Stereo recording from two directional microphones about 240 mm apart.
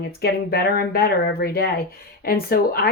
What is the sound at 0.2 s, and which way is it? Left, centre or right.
Speech, left.